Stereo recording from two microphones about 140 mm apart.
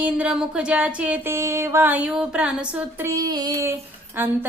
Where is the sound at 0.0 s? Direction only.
10° right (ahead or behind).